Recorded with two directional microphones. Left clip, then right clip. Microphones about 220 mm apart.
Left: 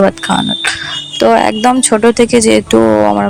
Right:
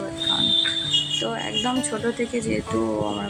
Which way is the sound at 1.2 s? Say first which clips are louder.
Left 17 dB; 45° left (ahead or behind).